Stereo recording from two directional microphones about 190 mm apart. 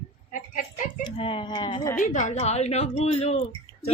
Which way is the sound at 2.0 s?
40° left (ahead or behind).